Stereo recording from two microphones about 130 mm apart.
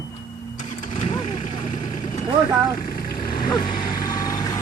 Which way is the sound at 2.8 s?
90° left.